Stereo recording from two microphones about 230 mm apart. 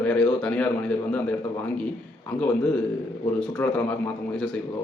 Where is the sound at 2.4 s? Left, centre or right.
Centre.